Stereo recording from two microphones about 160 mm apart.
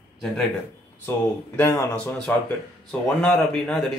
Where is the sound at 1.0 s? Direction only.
15° left (ahead or behind).